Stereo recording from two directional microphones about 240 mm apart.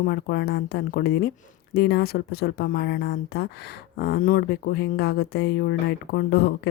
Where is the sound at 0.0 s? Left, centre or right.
Left.